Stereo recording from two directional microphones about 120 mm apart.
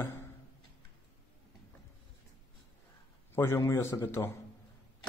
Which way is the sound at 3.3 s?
20° left (ahead or behind).